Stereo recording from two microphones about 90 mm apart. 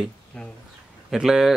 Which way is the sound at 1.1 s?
5° right (ahead or behind).